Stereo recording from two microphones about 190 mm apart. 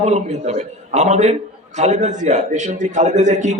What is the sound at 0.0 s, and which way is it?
A man's voice, 35° right (ahead or behind).